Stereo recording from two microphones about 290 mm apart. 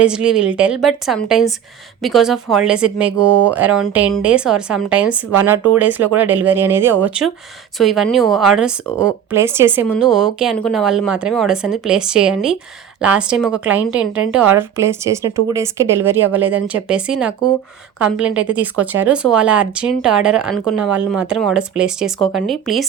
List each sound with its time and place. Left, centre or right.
0.0 s speech: centre
3.2 s speech: right
3.4 s speech: centre